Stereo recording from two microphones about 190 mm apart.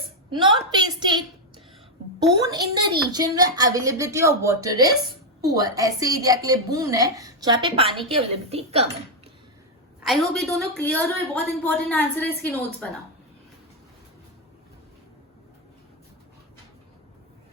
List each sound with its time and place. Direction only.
0.3 s a woman's voice: 25° right (ahead or behind)
2.4 s a woman's voice: 20° right (ahead or behind)
10.0 s a woman's voice: centre (ahead or behind)